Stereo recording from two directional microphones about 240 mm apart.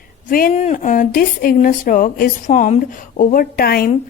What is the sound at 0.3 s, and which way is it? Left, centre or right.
Speech, left.